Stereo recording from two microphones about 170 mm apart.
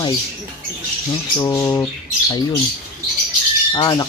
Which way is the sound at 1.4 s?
15° left (ahead or behind).